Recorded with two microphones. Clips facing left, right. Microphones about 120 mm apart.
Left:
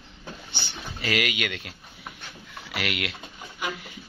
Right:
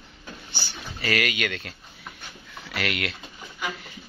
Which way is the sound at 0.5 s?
20° left (ahead or behind).